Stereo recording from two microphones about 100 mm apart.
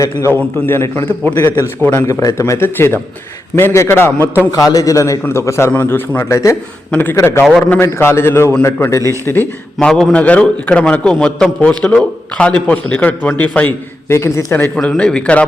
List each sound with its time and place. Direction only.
0.0 s a man's voice: 25° left (ahead or behind)
2.0 s a man's voice: 35° left (ahead or behind)
4.5 s a man's voice: 35° left (ahead or behind)
9.7 s a man's voice: 5° left (ahead or behind)
14.1 s a man's voice: 25° left (ahead or behind)
14.8 s a man's voice: 10° left (ahead or behind)